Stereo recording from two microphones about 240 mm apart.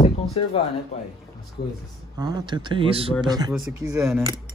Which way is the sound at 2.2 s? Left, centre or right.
Centre.